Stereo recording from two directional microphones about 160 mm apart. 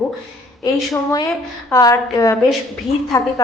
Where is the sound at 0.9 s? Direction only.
20° left (ahead or behind).